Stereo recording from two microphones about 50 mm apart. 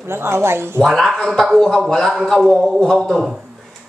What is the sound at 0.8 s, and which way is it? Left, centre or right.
Speech, centre.